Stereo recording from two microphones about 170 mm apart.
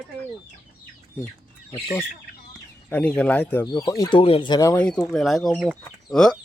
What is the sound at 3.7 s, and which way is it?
Speech, 20° left (ahead or behind).